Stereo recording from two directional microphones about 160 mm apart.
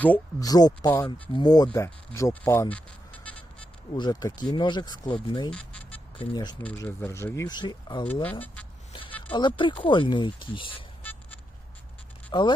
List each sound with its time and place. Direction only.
0.3 s speech: 25° left (ahead or behind)
3.9 s speech: 25° left (ahead or behind)
5.5 s music: 5° left (ahead or behind)
6.1 s speech: 25° left (ahead or behind)
6.6 s speech: 10° left (ahead or behind); by 8.0 s 25° left (ahead or behind)
8.0 s speech: 10° left (ahead or behind)
8.9 s a sound: 30° left (ahead or behind)
9.3 s speech: 30° left (ahead or behind)
11.0 s vehicle: 10° left (ahead or behind)
12.3 s speech: 30° left (ahead or behind)